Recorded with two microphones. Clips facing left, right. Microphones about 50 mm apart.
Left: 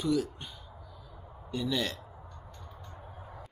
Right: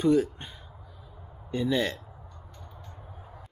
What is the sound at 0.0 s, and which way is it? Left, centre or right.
Speech, right.